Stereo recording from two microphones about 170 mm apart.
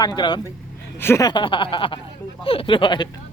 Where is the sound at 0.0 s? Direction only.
25° left (ahead or behind).